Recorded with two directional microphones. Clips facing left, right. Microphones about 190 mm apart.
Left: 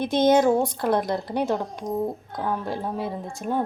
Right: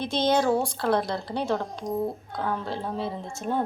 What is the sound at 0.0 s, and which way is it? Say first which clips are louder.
A woman's voice: left 5 dB; 20° left (ahead or behind).